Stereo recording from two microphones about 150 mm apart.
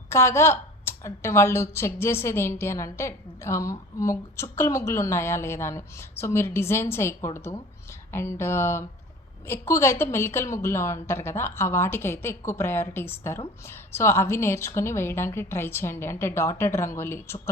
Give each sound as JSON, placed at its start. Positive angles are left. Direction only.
{"t": 0.1, "sound": "a woman's voice", "side_deg": 20}